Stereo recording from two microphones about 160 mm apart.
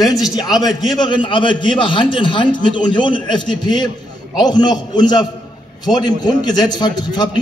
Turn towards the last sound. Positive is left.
turn(degrees=25)  # may be behind; listen again after turning